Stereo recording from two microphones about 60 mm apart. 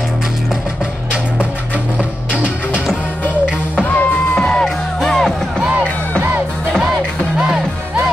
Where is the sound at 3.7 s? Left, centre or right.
Left.